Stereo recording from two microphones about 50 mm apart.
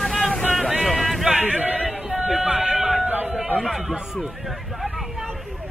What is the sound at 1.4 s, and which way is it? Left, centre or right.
Speech, right.